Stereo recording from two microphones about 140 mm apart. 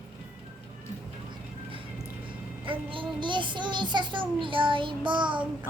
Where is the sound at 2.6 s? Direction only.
40° right (ahead or behind).